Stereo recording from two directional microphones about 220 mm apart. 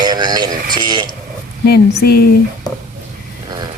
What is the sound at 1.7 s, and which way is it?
Speech, 45° left (ahead or behind).